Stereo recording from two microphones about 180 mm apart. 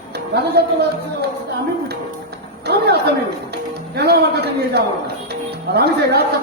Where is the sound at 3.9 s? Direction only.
65° right (ahead or behind).